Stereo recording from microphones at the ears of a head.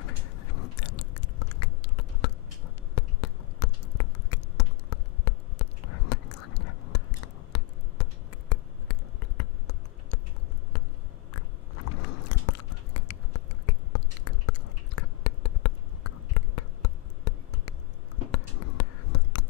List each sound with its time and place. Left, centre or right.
0.0 s biting: left
11.3 s biting: left
18.3 s a sound: left